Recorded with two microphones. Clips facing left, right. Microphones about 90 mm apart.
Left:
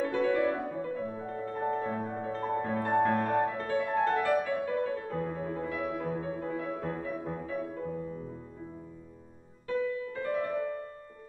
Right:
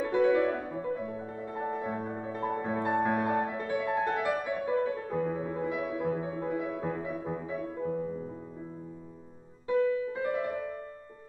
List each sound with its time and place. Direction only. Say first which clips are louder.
0.0 s music: right 2 dB; 15° right (ahead or behind)
9.7 s music: right 5 dB; 15° right (ahead or behind)